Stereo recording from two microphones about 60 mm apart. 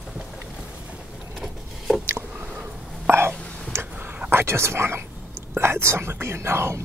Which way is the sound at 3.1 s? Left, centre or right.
Right.